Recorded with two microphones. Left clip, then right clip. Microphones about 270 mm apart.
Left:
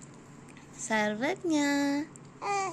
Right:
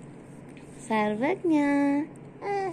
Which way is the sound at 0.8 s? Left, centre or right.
Left.